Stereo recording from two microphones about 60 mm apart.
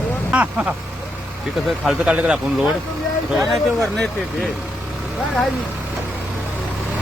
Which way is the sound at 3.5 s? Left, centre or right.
Centre.